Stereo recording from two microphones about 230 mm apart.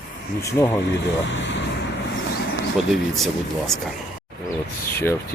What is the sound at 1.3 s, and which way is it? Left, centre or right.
Speech, left.